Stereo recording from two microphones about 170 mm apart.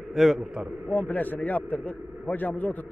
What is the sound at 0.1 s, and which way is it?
Speech, centre (ahead or behind).